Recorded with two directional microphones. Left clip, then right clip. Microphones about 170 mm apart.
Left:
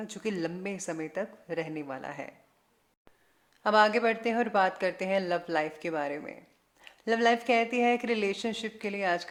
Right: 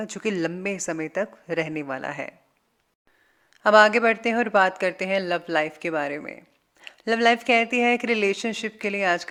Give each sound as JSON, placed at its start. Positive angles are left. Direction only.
{"t": 0.0, "sound": "a woman's voice", "side_deg": -30}
{"t": 3.6, "sound": "a woman's voice", "side_deg": -35}